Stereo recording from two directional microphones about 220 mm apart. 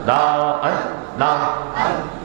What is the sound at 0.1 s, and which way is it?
A man's voice, 25° right (ahead or behind).